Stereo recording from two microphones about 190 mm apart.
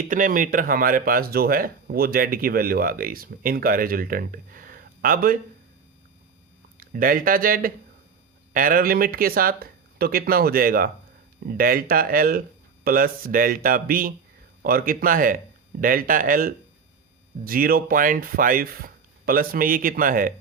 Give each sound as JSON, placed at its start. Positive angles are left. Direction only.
{"t": 0.1, "sound": "speech", "side_deg": -45}
{"t": 6.7, "sound": "speech", "side_deg": -50}